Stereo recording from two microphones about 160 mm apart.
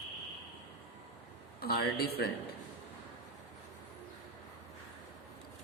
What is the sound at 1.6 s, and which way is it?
Speech, 70° left (ahead or behind).